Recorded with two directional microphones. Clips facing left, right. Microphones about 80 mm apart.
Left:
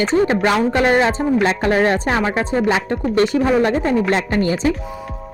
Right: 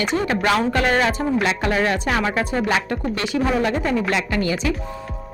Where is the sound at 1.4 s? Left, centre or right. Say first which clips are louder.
Left 5 dB; left.